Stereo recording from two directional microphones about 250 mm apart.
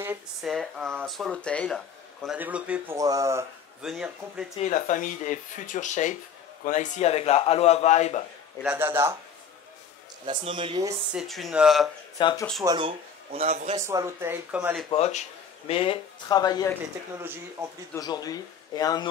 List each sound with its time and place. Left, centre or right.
0.0 s speech: centre
0.5 s speech: centre
3.8 s speech: centre
4.6 s a man's voice: left
8.6 s speech: centre
10.2 s speech: centre
11.1 s speech: centre
12.2 s a man's voice: centre
12.6 s speech: centre
13.8 s speech: centre
14.9 s speech: left
17.2 s speech: centre
17.9 s a man's voice: centre